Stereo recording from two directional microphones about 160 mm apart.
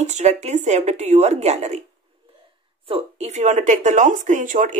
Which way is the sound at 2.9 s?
45° right (ahead or behind).